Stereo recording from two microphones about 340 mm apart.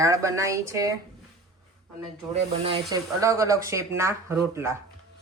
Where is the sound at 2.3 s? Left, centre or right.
Centre.